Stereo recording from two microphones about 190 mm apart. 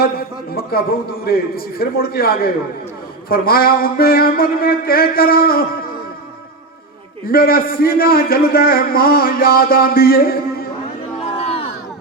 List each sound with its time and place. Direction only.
0.0 s a man's voice: 55° left (ahead or behind)
7.3 s a man's voice: 50° left (ahead or behind)
11.3 s music: 30° left (ahead or behind)